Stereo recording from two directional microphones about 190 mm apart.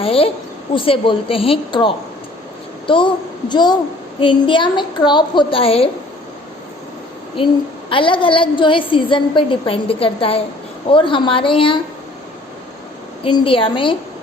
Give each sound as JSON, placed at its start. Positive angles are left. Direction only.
{"t": 0.0, "sound": "a woman's voice", "side_deg": 30}
{"t": 7.9, "sound": "a woman's voice", "side_deg": 25}
{"t": 13.2, "sound": "a woman's voice", "side_deg": 25}